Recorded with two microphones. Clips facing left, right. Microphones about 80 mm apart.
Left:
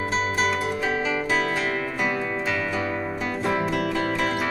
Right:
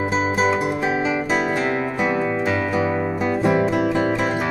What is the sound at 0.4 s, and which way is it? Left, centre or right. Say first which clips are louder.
Music: right 5 dB; centre.